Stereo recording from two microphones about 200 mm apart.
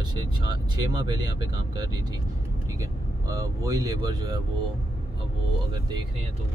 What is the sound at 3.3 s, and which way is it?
Speech, 15° right (ahead or behind).